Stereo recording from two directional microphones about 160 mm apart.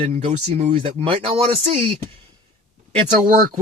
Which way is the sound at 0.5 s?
40° right (ahead or behind).